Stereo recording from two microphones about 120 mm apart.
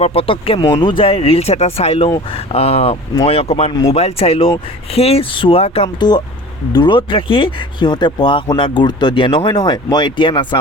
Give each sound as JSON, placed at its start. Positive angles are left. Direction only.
{"t": 0.0, "sound": "speech", "side_deg": 50}
{"t": 3.7, "sound": "speech", "side_deg": 35}
{"t": 3.9, "sound": "speech", "side_deg": 55}
{"t": 6.0, "sound": "speech", "side_deg": 35}